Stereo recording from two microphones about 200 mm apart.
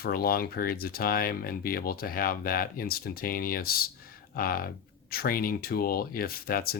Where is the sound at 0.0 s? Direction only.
50° left (ahead or behind).